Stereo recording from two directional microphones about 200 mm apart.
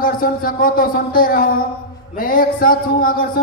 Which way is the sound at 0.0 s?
45° left (ahead or behind).